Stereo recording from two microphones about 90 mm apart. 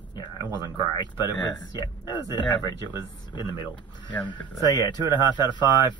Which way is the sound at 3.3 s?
60° left (ahead or behind).